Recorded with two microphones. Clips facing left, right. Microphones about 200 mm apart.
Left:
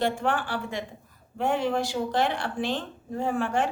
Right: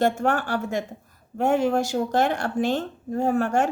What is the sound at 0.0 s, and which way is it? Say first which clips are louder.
A woman's voice: right 4 dB; 45° right (ahead or behind).